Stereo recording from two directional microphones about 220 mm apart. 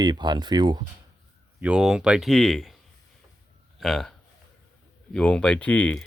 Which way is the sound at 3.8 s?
Centre (ahead or behind).